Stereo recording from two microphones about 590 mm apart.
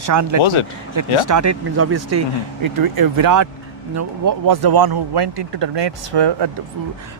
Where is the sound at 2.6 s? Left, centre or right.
Right.